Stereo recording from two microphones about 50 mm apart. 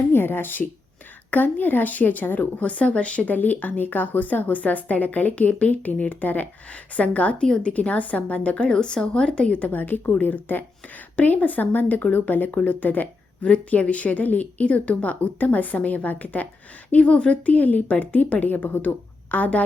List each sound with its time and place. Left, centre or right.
0.1 s a woman's voice: left
2.6 s a woman's voice: left
16.9 s a woman's voice: left